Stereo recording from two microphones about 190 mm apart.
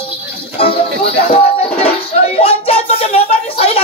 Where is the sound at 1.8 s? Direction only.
30° left (ahead or behind).